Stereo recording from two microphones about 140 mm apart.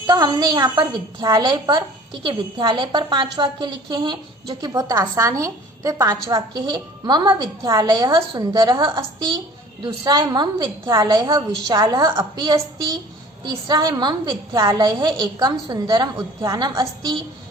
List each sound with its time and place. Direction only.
0.1 s a woman's voice: 30° right (ahead or behind)
13.4 s a woman's voice: 30° right (ahead or behind)